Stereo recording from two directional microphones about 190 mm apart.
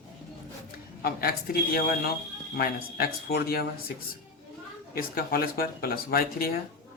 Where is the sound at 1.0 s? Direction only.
50° left (ahead or behind).